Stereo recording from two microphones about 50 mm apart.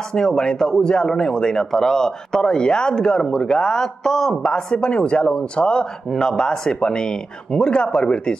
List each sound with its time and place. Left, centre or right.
0.1 s speech: centre